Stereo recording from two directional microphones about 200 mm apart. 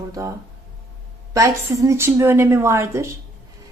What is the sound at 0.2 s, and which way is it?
Speech, 15° right (ahead or behind).